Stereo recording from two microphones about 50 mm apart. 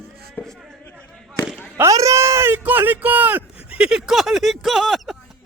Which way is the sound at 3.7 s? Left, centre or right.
Centre.